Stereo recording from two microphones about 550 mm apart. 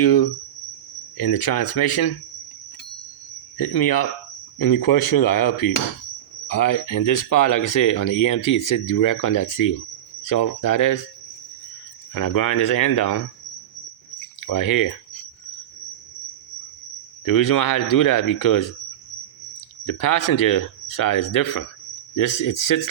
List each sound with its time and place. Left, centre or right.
0.0 s speech: left
3.6 s speech: left
12.1 s speech: left
14.4 s speech: left
17.2 s speech: left
19.8 s speech: left